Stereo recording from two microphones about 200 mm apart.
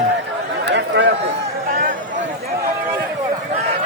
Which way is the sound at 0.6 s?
60° right (ahead or behind).